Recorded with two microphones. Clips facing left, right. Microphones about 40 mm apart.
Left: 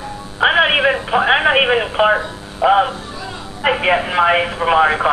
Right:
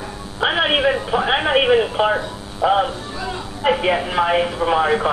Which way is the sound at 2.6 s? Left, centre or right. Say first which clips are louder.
Left 4 dB; left.